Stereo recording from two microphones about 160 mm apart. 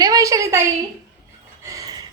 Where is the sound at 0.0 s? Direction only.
20° right (ahead or behind).